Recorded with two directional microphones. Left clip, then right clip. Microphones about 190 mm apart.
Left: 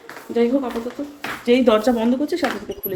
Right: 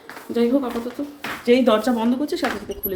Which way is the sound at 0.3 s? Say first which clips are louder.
Left 1 dB; 20° right (ahead or behind).